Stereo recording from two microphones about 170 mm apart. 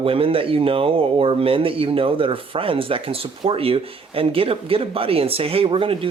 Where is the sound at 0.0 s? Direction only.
35° right (ahead or behind).